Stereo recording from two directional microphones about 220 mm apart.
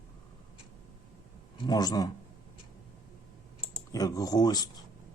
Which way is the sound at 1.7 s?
15° left (ahead or behind).